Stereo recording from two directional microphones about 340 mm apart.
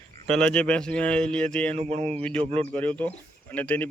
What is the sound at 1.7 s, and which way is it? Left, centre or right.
Speech, centre.